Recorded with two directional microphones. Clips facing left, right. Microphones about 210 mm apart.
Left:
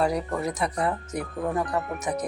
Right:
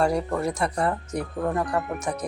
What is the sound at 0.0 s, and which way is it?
Speech, centre (ahead or behind).